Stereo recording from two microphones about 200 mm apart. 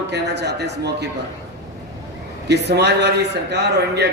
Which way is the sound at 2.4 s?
55° right (ahead or behind).